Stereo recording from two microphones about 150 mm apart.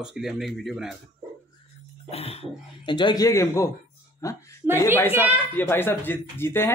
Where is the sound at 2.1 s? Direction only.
40° left (ahead or behind).